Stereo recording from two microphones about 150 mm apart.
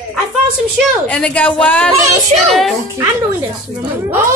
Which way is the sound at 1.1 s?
5° left (ahead or behind).